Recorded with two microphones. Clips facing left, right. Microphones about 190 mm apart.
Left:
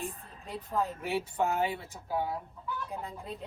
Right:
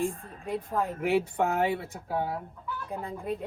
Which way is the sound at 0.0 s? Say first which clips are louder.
Right 9 dB; 55° right (ahead or behind).